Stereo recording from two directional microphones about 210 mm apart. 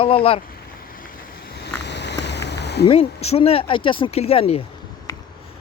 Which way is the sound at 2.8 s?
30° left (ahead or behind).